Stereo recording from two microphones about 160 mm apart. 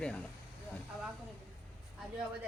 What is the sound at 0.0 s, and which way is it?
Speech, 5° left (ahead or behind).